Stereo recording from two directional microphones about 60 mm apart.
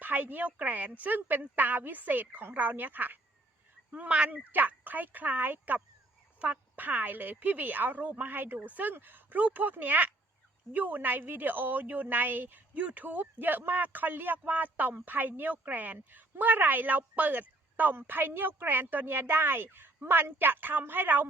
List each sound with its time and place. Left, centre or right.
0.0 s a woman's voice: right